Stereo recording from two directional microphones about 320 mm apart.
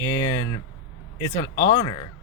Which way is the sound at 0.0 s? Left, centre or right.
Centre.